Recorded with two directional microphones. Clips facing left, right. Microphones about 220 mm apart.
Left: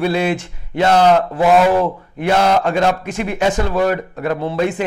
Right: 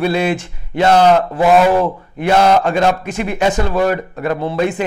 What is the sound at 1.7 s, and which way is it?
Speech, 40° right (ahead or behind).